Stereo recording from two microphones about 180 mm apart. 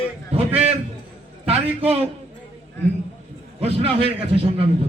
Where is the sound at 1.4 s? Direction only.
35° right (ahead or behind).